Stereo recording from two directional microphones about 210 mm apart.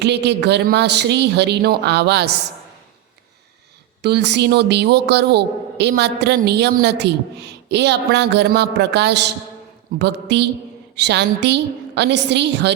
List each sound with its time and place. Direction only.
0.0 s a man's voice: 55° right (ahead or behind)
4.0 s a man's voice: 55° right (ahead or behind)